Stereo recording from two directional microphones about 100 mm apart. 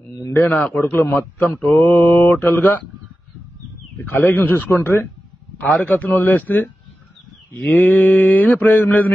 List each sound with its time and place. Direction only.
0.3 s mantra: 20° left (ahead or behind)
4.0 s mantra: 20° left (ahead or behind)
5.6 s a man's voice: 15° left (ahead or behind)
7.7 s mantra: 20° left (ahead or behind)